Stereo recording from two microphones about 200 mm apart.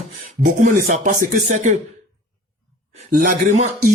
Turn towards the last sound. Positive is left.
turn(degrees=-40)  # may be behind; listen again after turning